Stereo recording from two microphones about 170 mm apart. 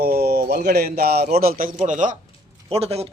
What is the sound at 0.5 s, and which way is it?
A man's voice, 65° right (ahead or behind).